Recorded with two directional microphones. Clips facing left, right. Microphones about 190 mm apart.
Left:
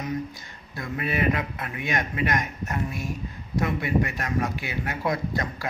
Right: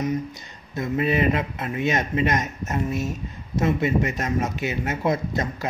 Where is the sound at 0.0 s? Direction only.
20° right (ahead or behind).